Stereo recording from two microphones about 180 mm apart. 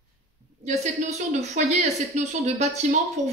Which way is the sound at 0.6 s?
40° right (ahead or behind).